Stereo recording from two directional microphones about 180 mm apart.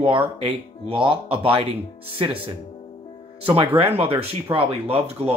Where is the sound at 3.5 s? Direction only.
30° right (ahead or behind).